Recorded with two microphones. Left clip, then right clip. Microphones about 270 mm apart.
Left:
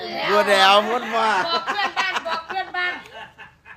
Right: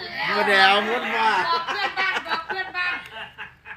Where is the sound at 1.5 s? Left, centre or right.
Left.